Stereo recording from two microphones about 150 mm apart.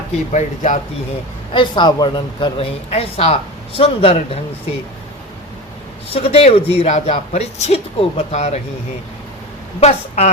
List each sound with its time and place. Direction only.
0.3 s speech: 50° left (ahead or behind)
1.5 s a woman's voice: 30° left (ahead or behind)
2.9 s a woman's voice: 45° left (ahead or behind)
6.1 s speech: 40° left (ahead or behind)
9.8 s speech: 45° left (ahead or behind)